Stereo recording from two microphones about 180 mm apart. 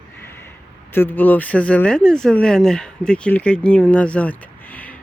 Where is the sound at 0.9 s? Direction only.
10° left (ahead or behind).